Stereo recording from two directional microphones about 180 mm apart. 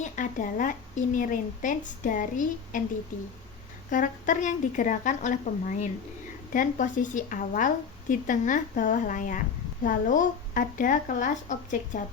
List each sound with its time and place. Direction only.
0.0 s a woman's voice: 45° left (ahead or behind)
3.8 s a woman's voice: 45° left (ahead or behind)